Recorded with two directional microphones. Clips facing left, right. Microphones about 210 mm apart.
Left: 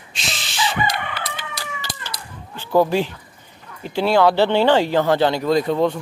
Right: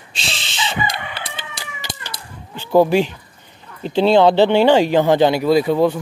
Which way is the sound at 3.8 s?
25° right (ahead or behind).